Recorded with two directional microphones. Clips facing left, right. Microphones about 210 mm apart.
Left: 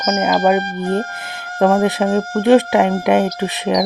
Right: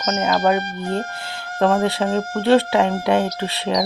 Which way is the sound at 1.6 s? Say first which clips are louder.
Left 4 dB; 15° left (ahead or behind).